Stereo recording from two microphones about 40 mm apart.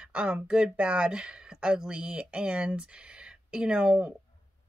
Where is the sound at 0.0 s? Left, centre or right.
Right.